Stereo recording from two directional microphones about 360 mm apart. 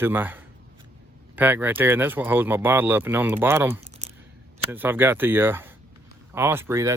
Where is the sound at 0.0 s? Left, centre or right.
Centre.